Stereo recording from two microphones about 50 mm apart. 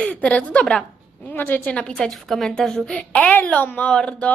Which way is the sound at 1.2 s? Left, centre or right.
Left.